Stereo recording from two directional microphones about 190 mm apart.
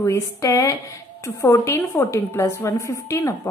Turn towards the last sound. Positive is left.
turn(degrees=15)  # may be behind; listen again after turning